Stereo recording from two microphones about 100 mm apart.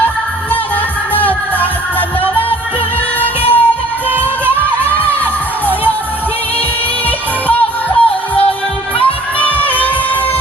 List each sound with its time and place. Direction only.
1.1 s music: 15° left (ahead or behind)
4.9 s music: 15° left (ahead or behind)
7.4 s music: 15° left (ahead or behind)
9.4 s music: 15° left (ahead or behind)